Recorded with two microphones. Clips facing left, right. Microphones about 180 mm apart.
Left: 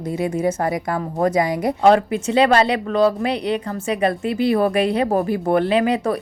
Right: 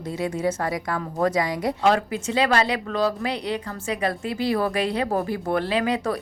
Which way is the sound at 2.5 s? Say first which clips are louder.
Left 5 dB; 25° left (ahead or behind).